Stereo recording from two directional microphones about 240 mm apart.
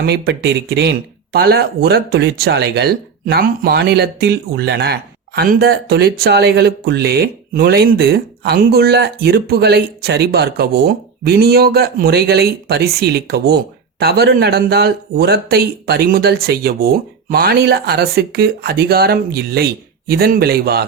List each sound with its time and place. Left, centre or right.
0.0 s speech: right